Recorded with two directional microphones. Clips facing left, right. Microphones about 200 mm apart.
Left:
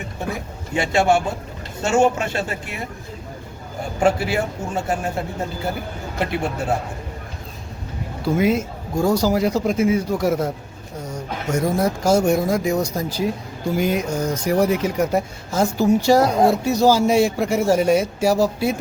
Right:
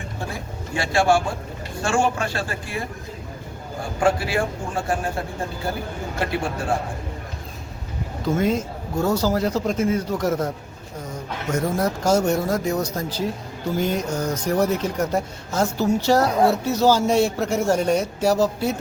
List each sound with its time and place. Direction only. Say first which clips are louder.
0.7 s a man's voice: left 2 dB; 20° left (ahead or behind)
4.0 s a man's voice: left 2 dB; 25° left (ahead or behind)
8.2 s speech: left 3 dB; 10° left (ahead or behind)